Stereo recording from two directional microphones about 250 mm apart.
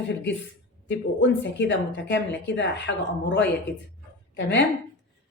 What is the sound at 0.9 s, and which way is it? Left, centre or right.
A woman's voice, left.